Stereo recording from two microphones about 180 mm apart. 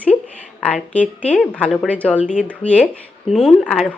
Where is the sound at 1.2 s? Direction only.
5° left (ahead or behind).